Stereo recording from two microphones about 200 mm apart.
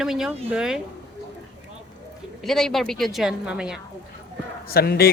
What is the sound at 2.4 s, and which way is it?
A woman's voice, centre (ahead or behind).